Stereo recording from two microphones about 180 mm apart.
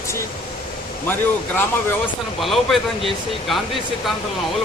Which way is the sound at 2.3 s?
Centre (ahead or behind).